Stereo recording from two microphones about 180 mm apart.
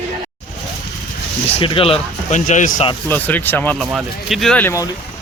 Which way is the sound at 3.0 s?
10° left (ahead or behind).